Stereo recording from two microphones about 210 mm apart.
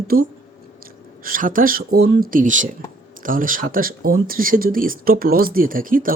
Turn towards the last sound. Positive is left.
turn(degrees=-40)  # may be behind; listen again after turning